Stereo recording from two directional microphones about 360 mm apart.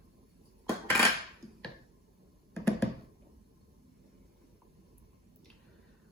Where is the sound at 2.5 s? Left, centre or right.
Centre.